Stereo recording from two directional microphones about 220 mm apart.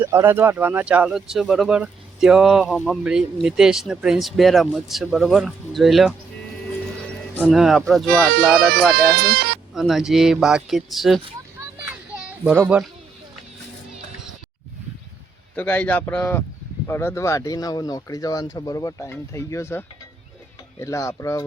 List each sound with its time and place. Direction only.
0.0 s speech: 10° right (ahead or behind)
7.4 s speech: centre (ahead or behind)
8.5 s speech: 45° right (ahead or behind)
9.7 s speech: centre (ahead or behind)
11.9 s children playing: 5° right (ahead or behind)
15.5 s speech: 10° left (ahead or behind)